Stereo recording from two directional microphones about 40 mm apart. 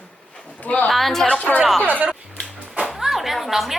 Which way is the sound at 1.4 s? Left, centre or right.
Left.